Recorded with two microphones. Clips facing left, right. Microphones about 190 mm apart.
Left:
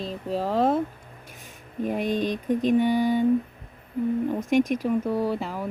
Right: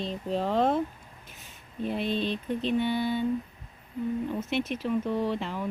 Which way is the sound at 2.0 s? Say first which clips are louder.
Left 3 dB; 15° left (ahead or behind).